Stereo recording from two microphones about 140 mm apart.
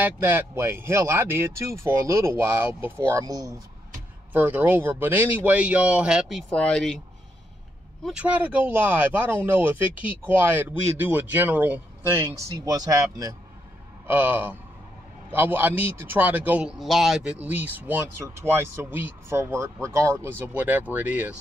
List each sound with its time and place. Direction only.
0.0 s speech: 15° right (ahead or behind)
4.3 s a man's voice: 10° right (ahead or behind); by 7.0 s 5° left (ahead or behind)
8.0 s a man's voice: 5° right (ahead or behind); by 13.4 s 25° right (ahead or behind)
14.0 s a man's voice: 15° right (ahead or behind)